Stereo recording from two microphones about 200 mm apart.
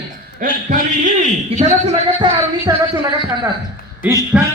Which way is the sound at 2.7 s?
20° right (ahead or behind).